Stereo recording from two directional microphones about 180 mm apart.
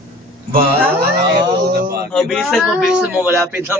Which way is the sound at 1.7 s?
60° right (ahead or behind).